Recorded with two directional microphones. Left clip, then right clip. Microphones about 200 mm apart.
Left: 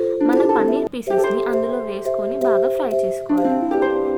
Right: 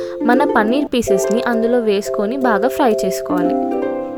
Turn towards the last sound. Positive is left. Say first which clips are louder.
# right 2 dB
turn(degrees=-45)  # may be behind; listen again after turning